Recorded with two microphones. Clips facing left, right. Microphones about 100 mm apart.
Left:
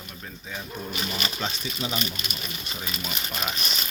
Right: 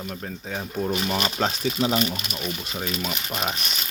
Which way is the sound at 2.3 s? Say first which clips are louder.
Right 6 dB; 90° right.